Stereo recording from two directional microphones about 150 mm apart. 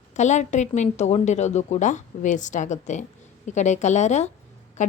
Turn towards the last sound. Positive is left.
turn(degrees=55)  # may be behind; listen again after turning